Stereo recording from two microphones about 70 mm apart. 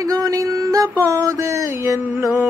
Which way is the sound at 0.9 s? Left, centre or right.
Right.